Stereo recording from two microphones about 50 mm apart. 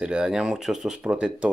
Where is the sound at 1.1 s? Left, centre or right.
Right.